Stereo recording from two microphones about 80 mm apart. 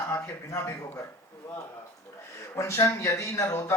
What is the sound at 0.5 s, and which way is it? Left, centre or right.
Speech, left.